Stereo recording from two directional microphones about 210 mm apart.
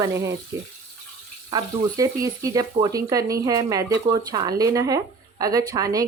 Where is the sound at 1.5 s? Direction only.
15° right (ahead or behind).